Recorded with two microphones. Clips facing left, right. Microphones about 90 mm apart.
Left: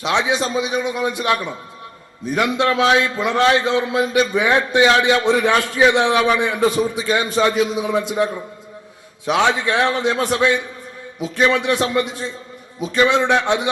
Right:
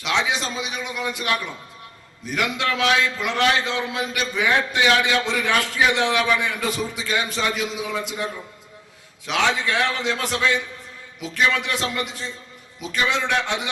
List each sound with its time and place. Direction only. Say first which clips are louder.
0.0 s a man's voice: left 5 dB; 25° left (ahead or behind)